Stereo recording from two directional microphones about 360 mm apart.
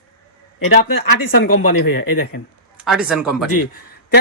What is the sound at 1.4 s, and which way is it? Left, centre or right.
Speech, left.